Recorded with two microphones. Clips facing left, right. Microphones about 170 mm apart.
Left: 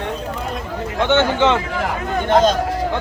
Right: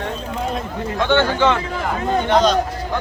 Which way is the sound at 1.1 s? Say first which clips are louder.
Left 1 dB; 20° left (ahead or behind).